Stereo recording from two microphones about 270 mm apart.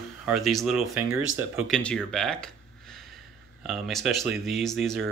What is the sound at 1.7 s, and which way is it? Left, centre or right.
Speech, centre.